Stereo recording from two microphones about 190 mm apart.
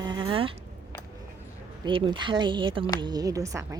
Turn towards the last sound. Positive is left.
turn(degrees=-15)  # may be behind; listen again after turning